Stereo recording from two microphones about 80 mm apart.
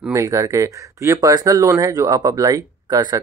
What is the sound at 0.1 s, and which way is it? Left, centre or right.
Speech, right.